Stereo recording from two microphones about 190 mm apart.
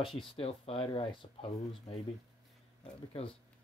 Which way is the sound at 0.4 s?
30° left (ahead or behind).